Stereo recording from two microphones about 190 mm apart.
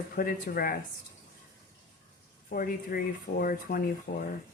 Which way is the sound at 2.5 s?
50° left (ahead or behind).